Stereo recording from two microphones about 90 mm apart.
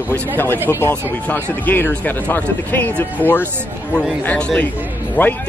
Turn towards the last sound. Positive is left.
turn(degrees=20)  # may be behind; listen again after turning